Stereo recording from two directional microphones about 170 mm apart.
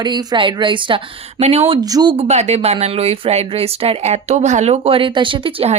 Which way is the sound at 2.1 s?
40° right (ahead or behind).